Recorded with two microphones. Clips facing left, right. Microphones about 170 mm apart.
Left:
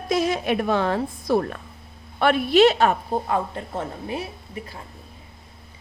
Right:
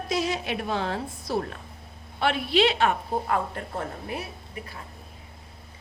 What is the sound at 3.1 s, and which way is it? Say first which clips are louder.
A woman's voice: left 3 dB; 20° left (ahead or behind).